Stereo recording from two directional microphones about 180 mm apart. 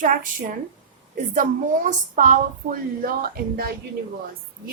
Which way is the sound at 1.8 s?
45° right (ahead or behind).